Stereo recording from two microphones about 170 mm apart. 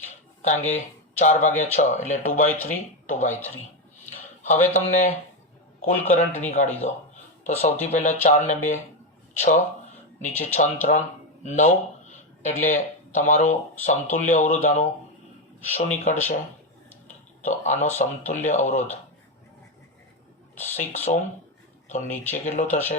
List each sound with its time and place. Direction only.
0.4 s speech: 45° left (ahead or behind)
4.0 s a sound: 45° left (ahead or behind)
5.8 s speech: 45° left (ahead or behind)
17.4 s speech: 45° left (ahead or behind)
20.7 s speech: 45° left (ahead or behind)
22.1 s speech: 10° left (ahead or behind)
22.4 s speech: 45° left (ahead or behind)